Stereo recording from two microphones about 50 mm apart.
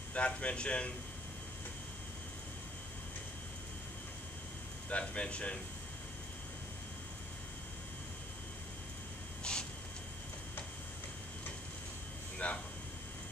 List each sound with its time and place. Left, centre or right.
0.1 s a man's voice: left
4.8 s a man's voice: left
9.4 s a sound: centre
12.4 s a man's voice: left